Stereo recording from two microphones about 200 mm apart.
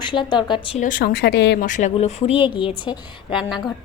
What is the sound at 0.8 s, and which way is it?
Speech, 45° left (ahead or behind).